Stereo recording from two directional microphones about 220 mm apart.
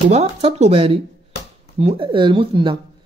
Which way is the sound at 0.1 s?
25° right (ahead or behind).